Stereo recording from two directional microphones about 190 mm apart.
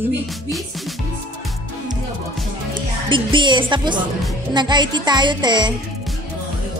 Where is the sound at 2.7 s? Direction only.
25° right (ahead or behind).